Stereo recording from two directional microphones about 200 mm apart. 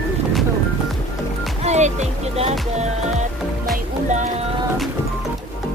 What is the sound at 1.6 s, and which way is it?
Music, 35° right (ahead or behind).